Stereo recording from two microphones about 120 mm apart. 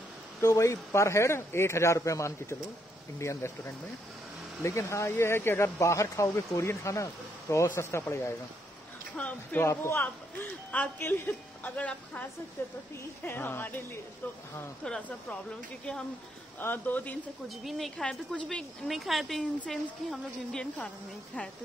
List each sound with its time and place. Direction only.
0.4 s speech: 30° left (ahead or behind)
9.1 s speech: 15° left (ahead or behind)
14.9 s speech: 10° left (ahead or behind)
16.5 s speech: 15° left (ahead or behind)
17.6 s a woman's voice: centre (ahead or behind)